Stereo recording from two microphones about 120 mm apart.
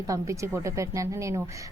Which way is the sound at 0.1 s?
25° right (ahead or behind).